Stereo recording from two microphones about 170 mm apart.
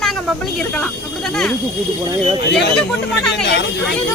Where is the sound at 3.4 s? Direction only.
80° left.